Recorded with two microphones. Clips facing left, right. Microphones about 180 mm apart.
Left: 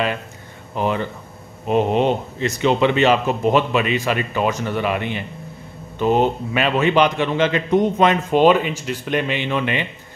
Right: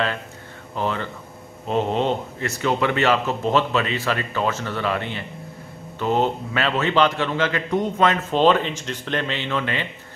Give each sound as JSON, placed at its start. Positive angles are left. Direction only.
{"t": 0.7, "sound": "a man's voice", "side_deg": 15}